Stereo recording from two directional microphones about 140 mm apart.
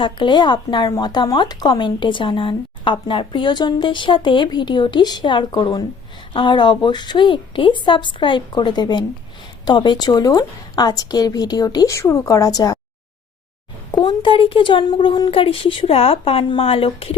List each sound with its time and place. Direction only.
0.0 s a woman's voice: 35° left (ahead or behind)
13.9 s speech: 35° left (ahead or behind)